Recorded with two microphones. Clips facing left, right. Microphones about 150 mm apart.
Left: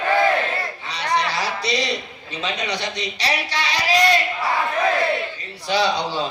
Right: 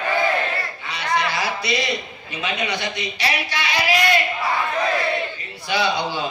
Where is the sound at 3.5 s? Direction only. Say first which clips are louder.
Even; 35° left (ahead or behind).